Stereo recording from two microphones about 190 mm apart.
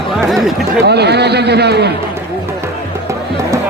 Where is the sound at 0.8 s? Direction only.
60° right (ahead or behind).